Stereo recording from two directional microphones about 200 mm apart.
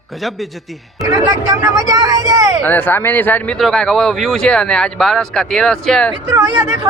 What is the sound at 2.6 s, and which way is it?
Speech, 10° left (ahead or behind).